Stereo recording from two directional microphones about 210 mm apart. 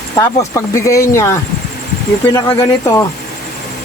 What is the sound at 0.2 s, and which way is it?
A man's voice, 15° left (ahead or behind).